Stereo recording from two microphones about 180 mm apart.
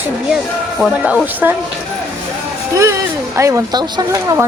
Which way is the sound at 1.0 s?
10° right (ahead or behind).